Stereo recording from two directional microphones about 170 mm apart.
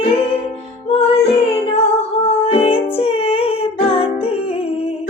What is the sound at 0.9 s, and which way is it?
Music, 35° left (ahead or behind).